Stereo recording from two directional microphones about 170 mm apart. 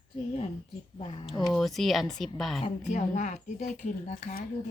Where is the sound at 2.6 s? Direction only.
45° left (ahead or behind).